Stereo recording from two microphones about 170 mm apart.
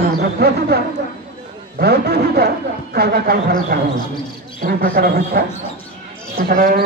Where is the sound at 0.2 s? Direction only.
70° right (ahead or behind).